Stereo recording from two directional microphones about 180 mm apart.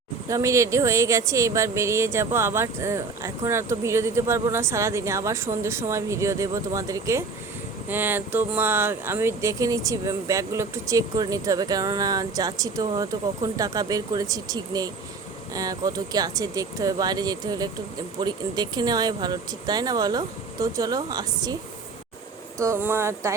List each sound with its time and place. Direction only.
0.3 s speech: 15° right (ahead or behind)
22.5 s speech: 15° right (ahead or behind)